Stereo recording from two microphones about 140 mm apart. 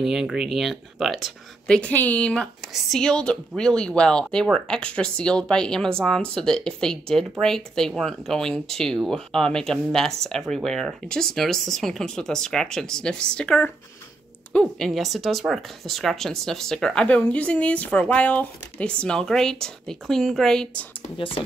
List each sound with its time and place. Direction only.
0.0 s speech: 5° right (ahead or behind)
21.0 s speech: 40° left (ahead or behind)